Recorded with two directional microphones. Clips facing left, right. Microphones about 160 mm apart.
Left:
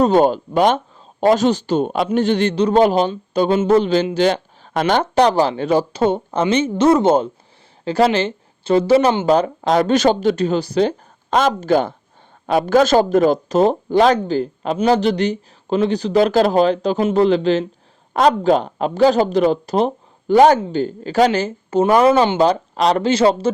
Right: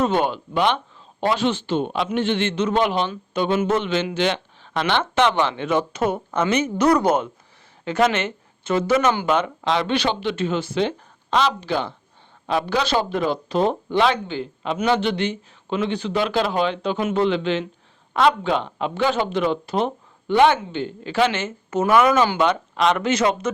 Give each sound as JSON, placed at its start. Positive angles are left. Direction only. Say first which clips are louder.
{"t": 0.0, "sound": "a man's voice", "louder": "left 7 dB", "side_deg": 40}